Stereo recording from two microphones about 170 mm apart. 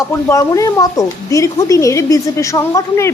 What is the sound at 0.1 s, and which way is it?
Speech, 15° left (ahead or behind).